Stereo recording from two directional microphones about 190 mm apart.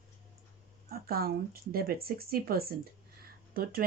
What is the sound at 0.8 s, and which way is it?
Speech, 50° right (ahead or behind).